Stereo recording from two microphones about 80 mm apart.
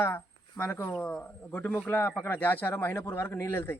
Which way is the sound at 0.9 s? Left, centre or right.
Centre.